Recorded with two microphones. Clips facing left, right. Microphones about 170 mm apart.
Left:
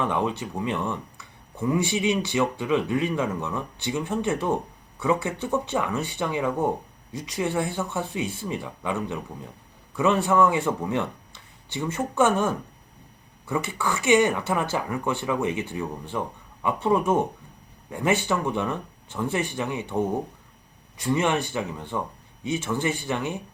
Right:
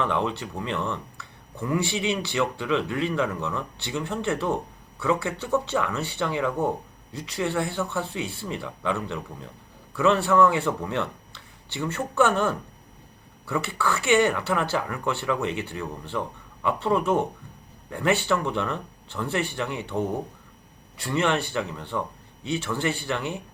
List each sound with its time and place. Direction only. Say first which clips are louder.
0.0 s speech: even; 15° left (ahead or behind)
21.0 s speech: left 1 dB; 15° left (ahead or behind)